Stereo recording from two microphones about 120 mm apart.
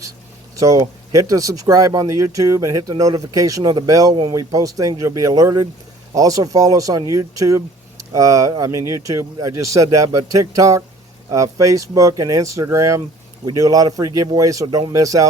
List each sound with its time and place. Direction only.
0.5 s speech: 25° right (ahead or behind)